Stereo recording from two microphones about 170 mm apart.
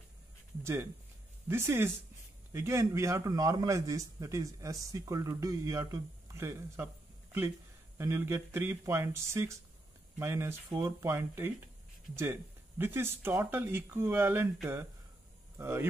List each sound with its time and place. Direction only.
1.5 s a man's voice: 15° right (ahead or behind)
8.0 s speech: 15° right (ahead or behind)
15.5 s speech: 15° right (ahead or behind)